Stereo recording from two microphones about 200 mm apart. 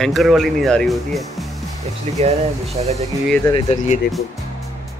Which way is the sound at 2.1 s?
30° right (ahead or behind).